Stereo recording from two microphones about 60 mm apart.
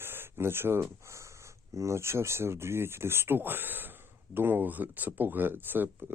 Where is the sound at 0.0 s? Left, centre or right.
Right.